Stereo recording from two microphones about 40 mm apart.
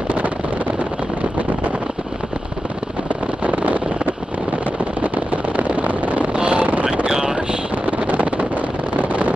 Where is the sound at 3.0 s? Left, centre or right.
Right.